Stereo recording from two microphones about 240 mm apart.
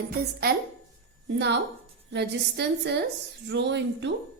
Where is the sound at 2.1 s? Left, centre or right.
Right.